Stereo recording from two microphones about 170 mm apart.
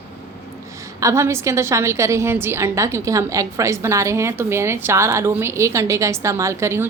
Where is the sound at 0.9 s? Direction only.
20° right (ahead or behind).